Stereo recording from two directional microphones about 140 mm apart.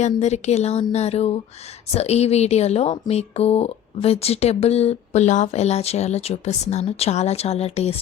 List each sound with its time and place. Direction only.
0.0 s speech: 55° left (ahead or behind)